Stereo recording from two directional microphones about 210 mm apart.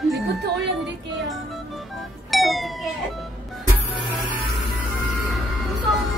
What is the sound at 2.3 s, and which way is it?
Speech, centre (ahead or behind).